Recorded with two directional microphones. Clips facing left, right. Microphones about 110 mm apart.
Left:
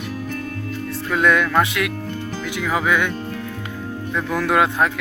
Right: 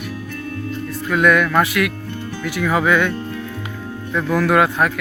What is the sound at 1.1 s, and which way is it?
Speech, 25° left (ahead or behind).